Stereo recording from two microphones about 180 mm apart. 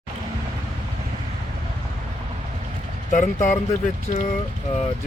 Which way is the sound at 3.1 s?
45° left (ahead or behind).